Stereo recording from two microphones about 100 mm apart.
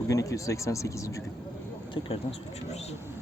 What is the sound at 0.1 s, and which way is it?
Speech, 30° left (ahead or behind).